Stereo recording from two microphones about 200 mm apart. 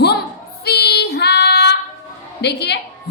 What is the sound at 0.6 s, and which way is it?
Child singing, 55° left (ahead or behind).